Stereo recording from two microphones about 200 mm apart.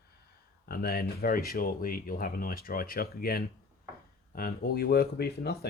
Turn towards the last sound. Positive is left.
turn(degrees=50)  # may be behind; listen again after turning